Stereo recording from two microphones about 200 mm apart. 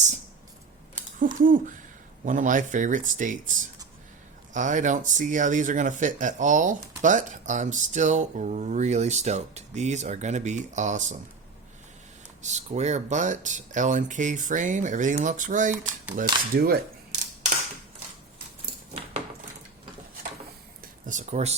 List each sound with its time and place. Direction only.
1.2 s speech: 40° right (ahead or behind)
4.5 s speech: 40° right (ahead or behind)
12.4 s speech: 35° right (ahead or behind)
21.1 s speech: 35° right (ahead or behind)